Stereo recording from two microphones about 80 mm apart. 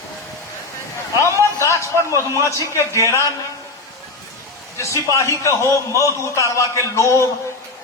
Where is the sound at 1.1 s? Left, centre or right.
Left.